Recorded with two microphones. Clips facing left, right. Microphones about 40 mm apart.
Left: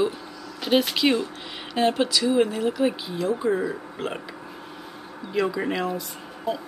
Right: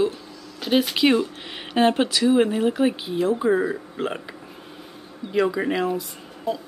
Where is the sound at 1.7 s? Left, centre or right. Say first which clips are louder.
Right 3 dB; right; by 4.2 s centre.